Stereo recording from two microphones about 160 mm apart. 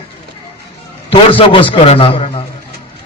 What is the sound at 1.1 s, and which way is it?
A man's voice, 35° left (ahead or behind).